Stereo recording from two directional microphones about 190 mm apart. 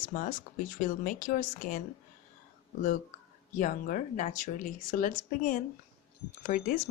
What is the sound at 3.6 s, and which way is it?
Speech, 45° left (ahead or behind).